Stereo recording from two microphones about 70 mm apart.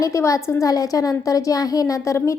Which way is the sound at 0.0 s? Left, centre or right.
Left.